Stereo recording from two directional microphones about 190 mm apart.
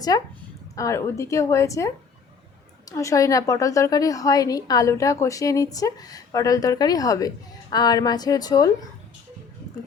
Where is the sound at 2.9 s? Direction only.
15° left (ahead or behind).